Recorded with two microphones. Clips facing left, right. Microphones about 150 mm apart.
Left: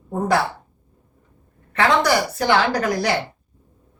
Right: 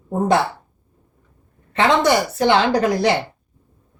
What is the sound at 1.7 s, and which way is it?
A woman's voice, 20° right (ahead or behind).